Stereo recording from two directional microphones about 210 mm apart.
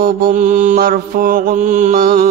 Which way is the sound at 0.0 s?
40° right (ahead or behind).